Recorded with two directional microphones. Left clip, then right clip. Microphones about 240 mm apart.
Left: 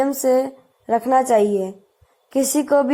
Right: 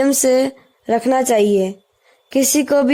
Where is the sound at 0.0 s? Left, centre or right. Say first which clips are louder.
Right 3 dB; right.